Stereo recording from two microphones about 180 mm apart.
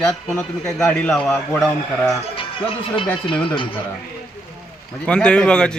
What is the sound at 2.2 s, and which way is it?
Speech, 30° left (ahead or behind).